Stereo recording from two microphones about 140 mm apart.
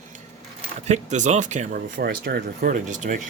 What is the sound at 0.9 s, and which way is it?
Speech, 60° right (ahead or behind).